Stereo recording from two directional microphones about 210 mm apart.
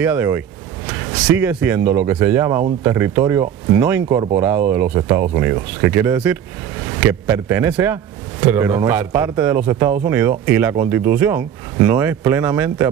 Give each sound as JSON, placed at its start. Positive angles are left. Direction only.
{"t": 0.0, "sound": "a man's voice", "side_deg": -10}